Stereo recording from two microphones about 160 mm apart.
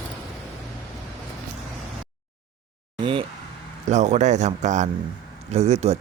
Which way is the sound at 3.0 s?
35° right (ahead or behind).